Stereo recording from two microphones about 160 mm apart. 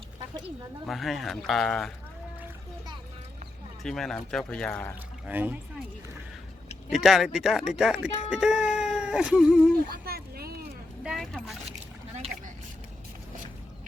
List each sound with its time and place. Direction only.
0.9 s speech: centre (ahead or behind)
3.8 s speech: centre (ahead or behind)
5.2 s speech: 10° right (ahead or behind)
6.9 s speech: centre (ahead or behind)
9.9 s a sound: 75° right (ahead or behind)
11.0 s single-lens reflex camera: centre (ahead or behind)